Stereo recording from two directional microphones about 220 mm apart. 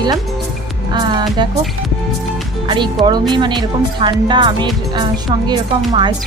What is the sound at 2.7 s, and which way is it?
Speech, 20° right (ahead or behind).